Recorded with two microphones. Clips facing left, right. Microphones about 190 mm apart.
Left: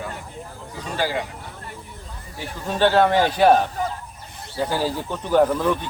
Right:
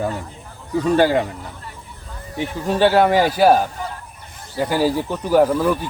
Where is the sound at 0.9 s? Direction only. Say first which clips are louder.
Right 8 dB; 55° right (ahead or behind).